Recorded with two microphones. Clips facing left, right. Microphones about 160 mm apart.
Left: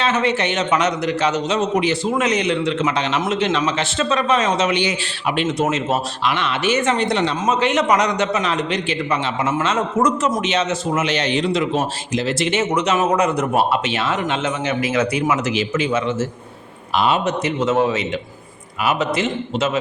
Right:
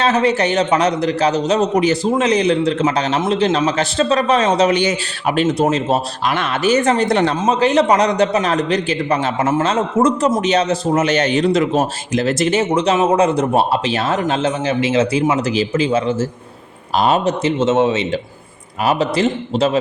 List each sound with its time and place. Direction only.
0.0 s a man's voice: 35° right (ahead or behind)
6.3 s speech: 45° right (ahead or behind)
7.4 s a man's voice: 35° right (ahead or behind)